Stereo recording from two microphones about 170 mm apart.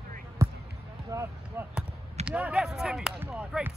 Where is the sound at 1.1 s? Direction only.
20° right (ahead or behind).